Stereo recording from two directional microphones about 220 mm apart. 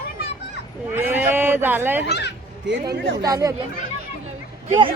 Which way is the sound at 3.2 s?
15° right (ahead or behind).